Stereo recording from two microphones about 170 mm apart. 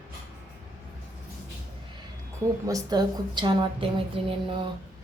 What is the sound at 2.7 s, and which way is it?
Speech, 20° right (ahead or behind).